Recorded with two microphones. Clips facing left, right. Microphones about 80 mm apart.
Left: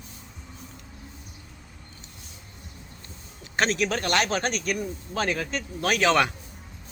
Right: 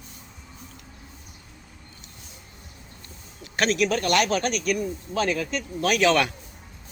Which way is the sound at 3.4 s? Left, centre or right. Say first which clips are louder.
Right 2 dB; left.